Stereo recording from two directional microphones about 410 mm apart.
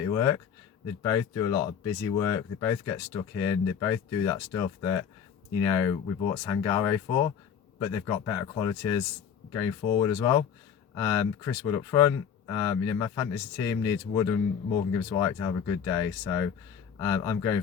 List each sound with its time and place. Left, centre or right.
0.0 s speech: centre